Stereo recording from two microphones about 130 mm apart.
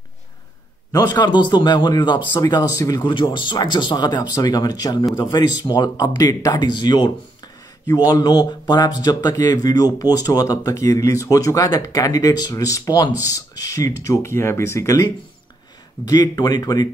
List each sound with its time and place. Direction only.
0.9 s speech: 30° left (ahead or behind)
8.1 s speech: 30° left (ahead or behind)
16.1 s speech: 30° left (ahead or behind)